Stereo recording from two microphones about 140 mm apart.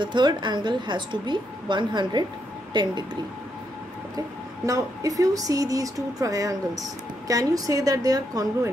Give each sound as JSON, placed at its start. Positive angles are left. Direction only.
{"t": 0.0, "sound": "a woman's voice", "side_deg": -35}
{"t": 4.6, "sound": "speech", "side_deg": -25}